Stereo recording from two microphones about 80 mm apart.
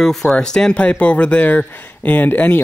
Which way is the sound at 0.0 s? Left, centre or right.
Centre.